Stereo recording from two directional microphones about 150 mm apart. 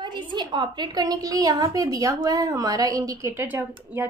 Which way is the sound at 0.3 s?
30° right (ahead or behind).